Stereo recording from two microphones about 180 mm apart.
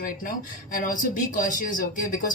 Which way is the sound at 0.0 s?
50° left (ahead or behind).